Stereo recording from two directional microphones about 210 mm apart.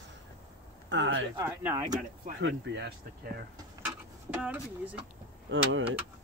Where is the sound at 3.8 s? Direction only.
5° right (ahead or behind).